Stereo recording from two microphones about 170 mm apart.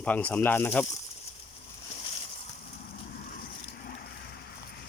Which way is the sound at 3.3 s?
60° left (ahead or behind).